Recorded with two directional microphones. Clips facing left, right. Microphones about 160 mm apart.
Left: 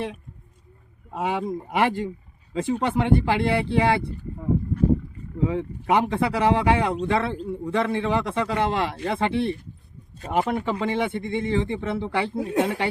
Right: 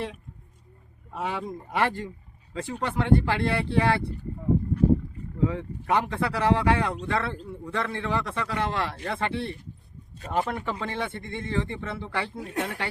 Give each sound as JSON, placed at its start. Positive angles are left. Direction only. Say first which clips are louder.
{"t": 1.1, "sound": "speech", "louder": "left 5 dB", "side_deg": 15}
{"t": 5.5, "sound": "speech", "louder": "left 4 dB", "side_deg": 15}